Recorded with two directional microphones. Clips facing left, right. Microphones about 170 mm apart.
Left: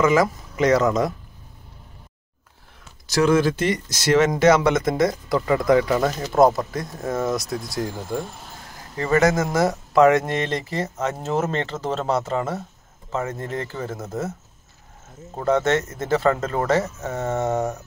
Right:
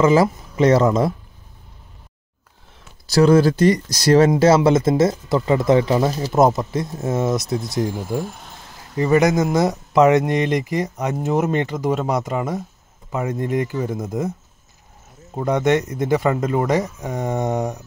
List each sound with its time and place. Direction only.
0.0 s speech: 30° right (ahead or behind)
3.1 s speech: 35° right (ahead or behind); by 14.3 s 15° right (ahead or behind)
15.3 s speech: 15° right (ahead or behind)